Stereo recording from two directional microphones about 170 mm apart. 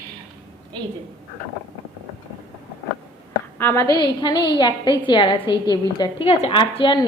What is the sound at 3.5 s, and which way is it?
A woman's voice, 10° left (ahead or behind).